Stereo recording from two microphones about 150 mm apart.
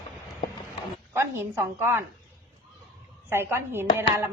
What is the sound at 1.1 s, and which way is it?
Speech, 15° right (ahead or behind).